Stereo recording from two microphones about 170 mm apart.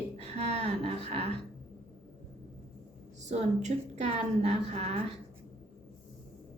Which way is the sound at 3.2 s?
40° right (ahead or behind).